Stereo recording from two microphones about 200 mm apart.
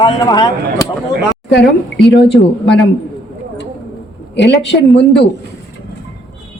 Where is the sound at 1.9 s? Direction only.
55° left (ahead or behind).